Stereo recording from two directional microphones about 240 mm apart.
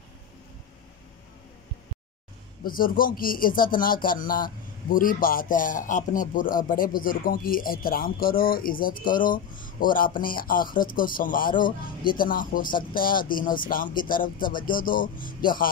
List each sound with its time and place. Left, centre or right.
2.6 s a man's voice: left